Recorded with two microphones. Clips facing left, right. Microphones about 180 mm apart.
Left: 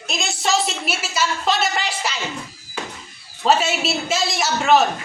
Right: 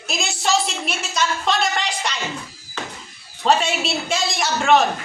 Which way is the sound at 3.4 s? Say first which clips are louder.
Left 1 dB; 5° left (ahead or behind).